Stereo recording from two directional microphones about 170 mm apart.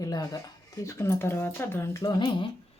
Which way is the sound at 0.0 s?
20° left (ahead or behind).